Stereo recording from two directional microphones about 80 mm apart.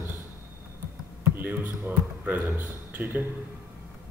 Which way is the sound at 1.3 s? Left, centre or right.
Right.